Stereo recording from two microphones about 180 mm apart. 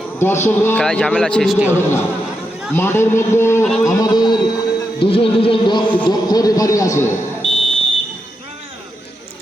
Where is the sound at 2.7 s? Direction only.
15° left (ahead or behind).